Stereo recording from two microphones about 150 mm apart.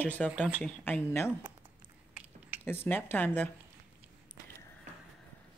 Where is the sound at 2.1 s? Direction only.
10° right (ahead or behind).